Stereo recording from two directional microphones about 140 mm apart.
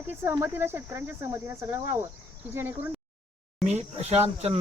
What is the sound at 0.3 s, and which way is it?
Speech, 20° right (ahead or behind).